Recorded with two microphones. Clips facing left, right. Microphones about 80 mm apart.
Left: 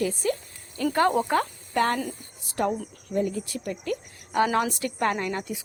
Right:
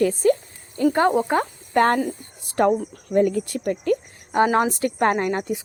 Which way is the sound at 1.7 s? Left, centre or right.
Right.